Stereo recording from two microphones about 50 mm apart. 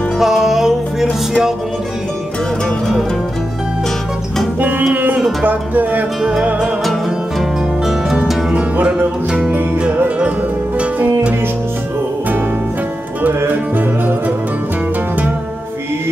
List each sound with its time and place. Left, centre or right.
0.2 s music: centre
4.6 s music: right
8.8 s music: right
13.7 s music: right